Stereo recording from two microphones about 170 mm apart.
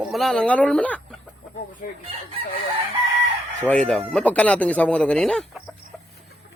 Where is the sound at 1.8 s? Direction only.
55° left (ahead or behind).